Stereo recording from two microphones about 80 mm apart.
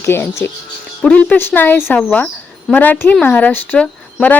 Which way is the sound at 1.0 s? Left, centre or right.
Centre.